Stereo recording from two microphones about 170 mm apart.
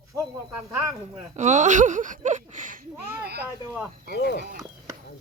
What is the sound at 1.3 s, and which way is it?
Speech, 45° right (ahead or behind).